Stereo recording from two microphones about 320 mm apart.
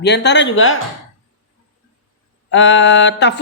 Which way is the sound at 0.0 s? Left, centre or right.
Left.